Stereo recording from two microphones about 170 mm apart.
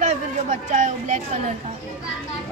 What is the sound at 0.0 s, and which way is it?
Speech, 45° right (ahead or behind).